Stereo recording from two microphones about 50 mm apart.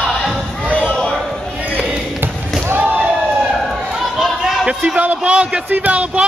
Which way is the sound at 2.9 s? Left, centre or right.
Right.